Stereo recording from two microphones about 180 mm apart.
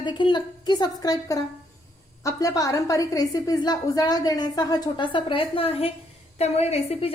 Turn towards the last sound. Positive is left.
turn(degrees=35)  # may be behind; listen again after turning